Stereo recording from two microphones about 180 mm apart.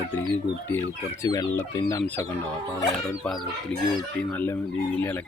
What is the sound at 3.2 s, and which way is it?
Speech, centre (ahead or behind).